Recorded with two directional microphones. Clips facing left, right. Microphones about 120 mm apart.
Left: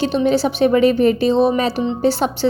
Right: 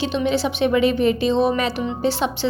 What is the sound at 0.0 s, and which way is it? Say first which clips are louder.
Speech: left 4 dB; 40° left (ahead or behind).